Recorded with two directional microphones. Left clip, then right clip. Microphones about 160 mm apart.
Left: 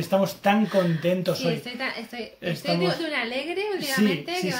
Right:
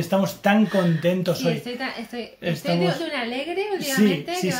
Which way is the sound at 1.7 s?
30° left (ahead or behind).